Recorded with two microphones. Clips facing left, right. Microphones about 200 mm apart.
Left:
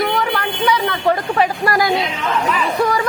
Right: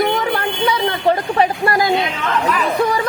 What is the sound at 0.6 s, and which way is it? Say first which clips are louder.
Speech: even; 25° right (ahead or behind).